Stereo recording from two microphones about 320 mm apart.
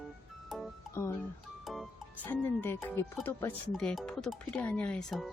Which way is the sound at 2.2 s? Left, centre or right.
Centre.